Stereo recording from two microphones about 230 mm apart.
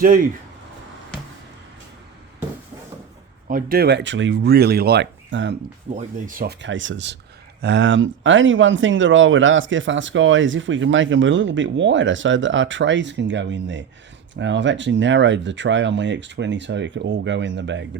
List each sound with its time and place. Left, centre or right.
3.5 s speech: right
5.9 s speech: right